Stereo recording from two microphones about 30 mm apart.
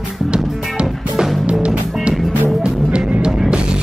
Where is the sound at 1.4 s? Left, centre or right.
Right.